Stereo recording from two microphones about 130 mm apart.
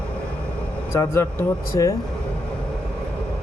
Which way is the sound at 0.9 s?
20° left (ahead or behind).